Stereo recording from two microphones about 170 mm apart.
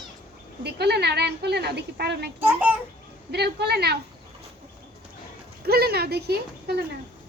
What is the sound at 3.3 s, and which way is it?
Speech, 75° right (ahead or behind).